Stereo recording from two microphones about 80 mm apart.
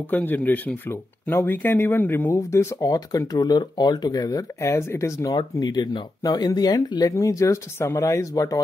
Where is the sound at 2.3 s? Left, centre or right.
Left.